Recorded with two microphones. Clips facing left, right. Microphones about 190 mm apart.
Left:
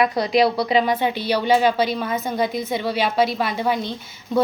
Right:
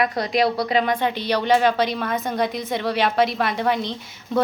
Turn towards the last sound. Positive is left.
turn(degrees=0)  # may be behind; listen again after turning